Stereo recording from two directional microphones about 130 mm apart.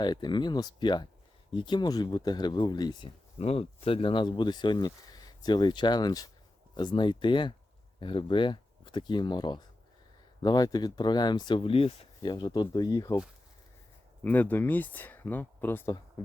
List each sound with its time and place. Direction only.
0.0 s speech: 35° left (ahead or behind)
3.3 s speech: 50° left (ahead or behind); by 13.1 s 30° left (ahead or behind)
14.3 s speech: 15° left (ahead or behind)